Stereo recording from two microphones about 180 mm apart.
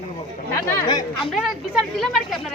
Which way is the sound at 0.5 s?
20° left (ahead or behind).